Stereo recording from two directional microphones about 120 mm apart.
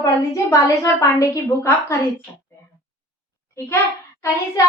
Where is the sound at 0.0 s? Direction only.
30° left (ahead or behind).